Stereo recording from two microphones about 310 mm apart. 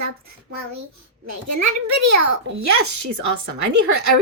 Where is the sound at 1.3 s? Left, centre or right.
Right.